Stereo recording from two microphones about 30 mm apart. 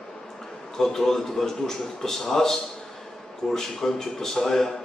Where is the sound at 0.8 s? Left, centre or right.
Centre.